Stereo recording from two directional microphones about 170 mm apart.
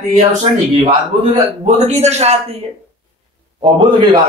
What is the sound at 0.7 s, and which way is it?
A man's voice, 40° right (ahead or behind).